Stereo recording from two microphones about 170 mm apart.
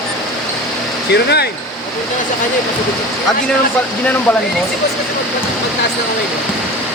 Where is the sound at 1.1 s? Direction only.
75° left (ahead or behind).